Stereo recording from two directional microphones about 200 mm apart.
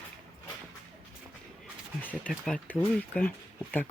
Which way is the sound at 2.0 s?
5° left (ahead or behind).